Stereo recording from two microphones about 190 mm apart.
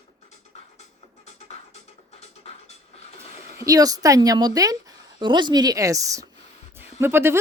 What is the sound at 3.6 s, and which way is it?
A woman's voice, 20° right (ahead or behind).